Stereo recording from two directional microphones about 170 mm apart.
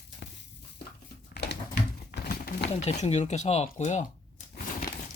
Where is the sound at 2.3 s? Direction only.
60° left (ahead or behind).